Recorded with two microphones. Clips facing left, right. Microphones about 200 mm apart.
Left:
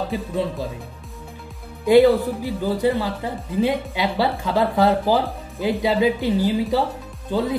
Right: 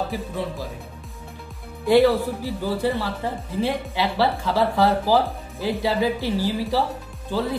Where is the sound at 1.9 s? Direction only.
15° left (ahead or behind).